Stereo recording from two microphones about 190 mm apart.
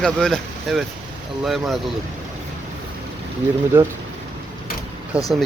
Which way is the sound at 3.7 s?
10° right (ahead or behind).